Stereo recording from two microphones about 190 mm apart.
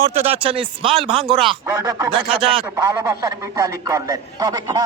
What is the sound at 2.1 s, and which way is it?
Speech, 30° right (ahead or behind).